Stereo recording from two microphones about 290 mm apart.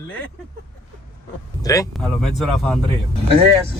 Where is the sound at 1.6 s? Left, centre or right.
Centre.